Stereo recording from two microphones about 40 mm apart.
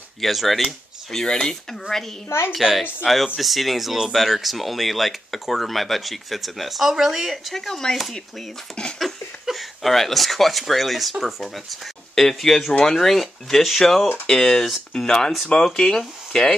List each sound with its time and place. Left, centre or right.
0.2 s speech: centre
1.2 s speech: centre
2.5 s speech: centre
7.5 s speech: centre
14.2 s speech: centre